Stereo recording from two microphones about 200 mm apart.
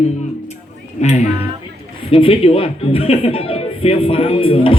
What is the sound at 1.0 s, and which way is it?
Speech, 35° left (ahead or behind).